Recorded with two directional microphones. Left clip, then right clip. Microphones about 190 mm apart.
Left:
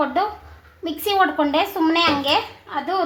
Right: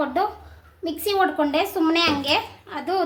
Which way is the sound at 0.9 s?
10° right (ahead or behind).